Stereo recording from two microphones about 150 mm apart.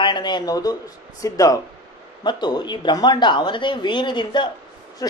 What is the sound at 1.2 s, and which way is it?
Speech, 25° left (ahead or behind).